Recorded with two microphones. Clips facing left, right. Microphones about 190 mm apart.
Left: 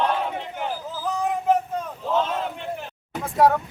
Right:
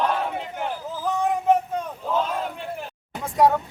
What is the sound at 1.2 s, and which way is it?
Music, centre (ahead or behind).